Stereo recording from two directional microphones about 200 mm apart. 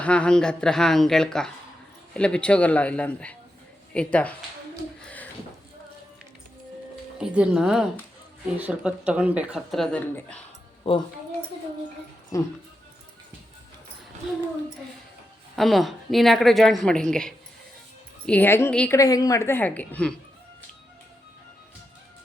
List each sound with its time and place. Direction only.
0.0 s a man's voice: 5° left (ahead or behind)
5.0 s a sound: 10° left (ahead or behind)
7.2 s speech: 5° right (ahead or behind)
10.8 s speech: 25° left (ahead or behind)
12.3 s a man's voice: 15° left (ahead or behind)
15.5 s a man's voice: centre (ahead or behind)